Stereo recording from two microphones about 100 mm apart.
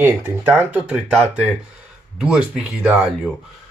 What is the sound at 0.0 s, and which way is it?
Speech, 20° right (ahead or behind).